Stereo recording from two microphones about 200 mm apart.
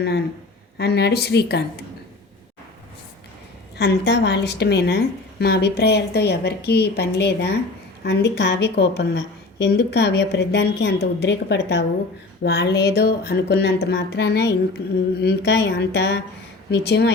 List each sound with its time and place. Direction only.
0.8 s a woman's voice: 55° left (ahead or behind)
3.8 s a woman's voice: 55° left (ahead or behind)